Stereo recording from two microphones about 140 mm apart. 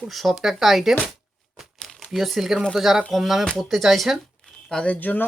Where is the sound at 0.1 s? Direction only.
Centre (ahead or behind).